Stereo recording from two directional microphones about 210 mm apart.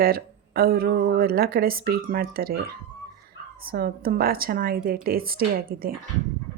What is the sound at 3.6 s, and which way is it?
A woman's voice, 45° right (ahead or behind).